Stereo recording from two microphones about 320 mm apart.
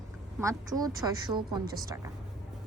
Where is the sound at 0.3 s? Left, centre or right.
Centre.